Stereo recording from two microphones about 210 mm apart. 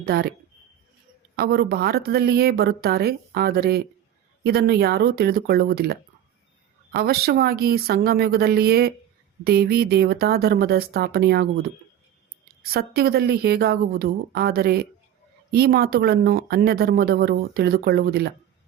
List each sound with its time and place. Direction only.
0.0 s speech: 45° right (ahead or behind)
1.4 s speech: 50° right (ahead or behind)
12.6 s speech: 45° right (ahead or behind)